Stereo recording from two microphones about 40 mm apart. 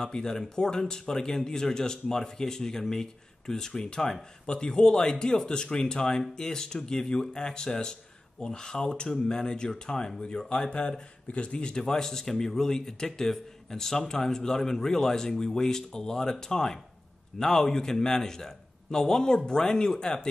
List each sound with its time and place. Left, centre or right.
0.0 s speech: centre
11.7 s speech: centre